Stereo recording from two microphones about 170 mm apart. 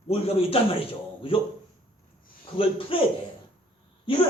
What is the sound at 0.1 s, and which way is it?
A man's voice, 35° left (ahead or behind).